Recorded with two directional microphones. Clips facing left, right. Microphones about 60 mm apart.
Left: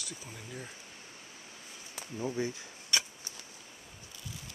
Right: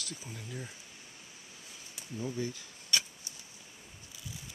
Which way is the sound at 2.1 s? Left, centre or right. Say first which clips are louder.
Left 2 dB; left.